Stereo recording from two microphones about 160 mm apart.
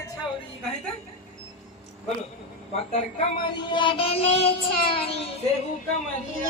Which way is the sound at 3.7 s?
30° left (ahead or behind).